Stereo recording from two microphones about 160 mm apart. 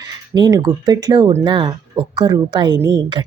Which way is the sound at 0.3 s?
25° right (ahead or behind).